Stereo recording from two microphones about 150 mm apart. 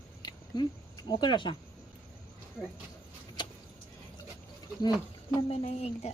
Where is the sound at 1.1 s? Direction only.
30° left (ahead or behind).